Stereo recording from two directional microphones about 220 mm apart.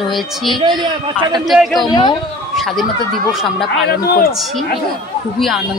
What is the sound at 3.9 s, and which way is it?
Speech, 40° left (ahead or behind).